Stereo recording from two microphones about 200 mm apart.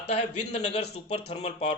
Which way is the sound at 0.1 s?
30° left (ahead or behind).